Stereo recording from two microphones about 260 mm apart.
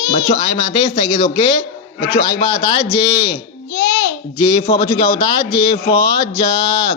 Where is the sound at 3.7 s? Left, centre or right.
Left.